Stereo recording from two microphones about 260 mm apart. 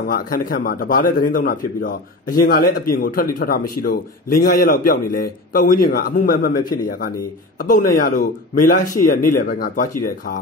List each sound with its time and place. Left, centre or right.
0.1 s a man's voice: left